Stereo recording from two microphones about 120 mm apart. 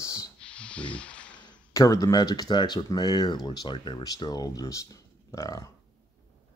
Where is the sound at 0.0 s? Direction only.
25° left (ahead or behind).